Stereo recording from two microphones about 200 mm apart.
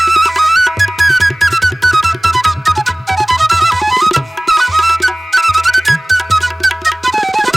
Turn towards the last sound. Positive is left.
turn(degrees=0)  # may be behind; listen again after turning